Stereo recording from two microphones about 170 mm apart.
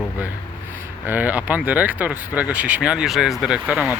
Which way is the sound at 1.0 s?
10° right (ahead or behind).